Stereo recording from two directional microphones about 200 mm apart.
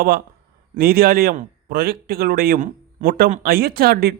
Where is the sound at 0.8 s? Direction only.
50° right (ahead or behind).